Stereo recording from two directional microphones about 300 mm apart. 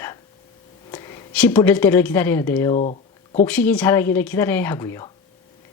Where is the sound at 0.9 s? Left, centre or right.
Centre.